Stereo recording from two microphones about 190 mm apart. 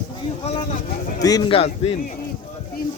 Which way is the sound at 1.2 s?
20° left (ahead or behind).